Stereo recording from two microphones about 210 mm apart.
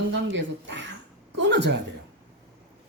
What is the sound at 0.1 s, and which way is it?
A man's voice, 60° right (ahead or behind).